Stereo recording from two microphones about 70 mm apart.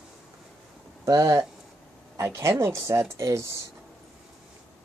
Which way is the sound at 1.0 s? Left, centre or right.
Right.